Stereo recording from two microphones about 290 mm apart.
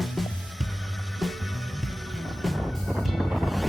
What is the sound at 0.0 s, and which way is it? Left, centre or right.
Music, centre.